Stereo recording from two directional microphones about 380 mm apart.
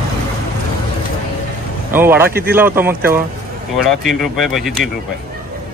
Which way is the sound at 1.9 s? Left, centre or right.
Centre.